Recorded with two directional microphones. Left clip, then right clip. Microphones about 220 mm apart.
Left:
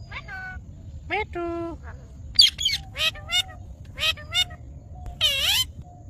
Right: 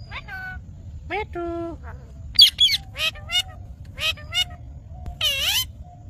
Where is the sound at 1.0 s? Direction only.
Centre (ahead or behind).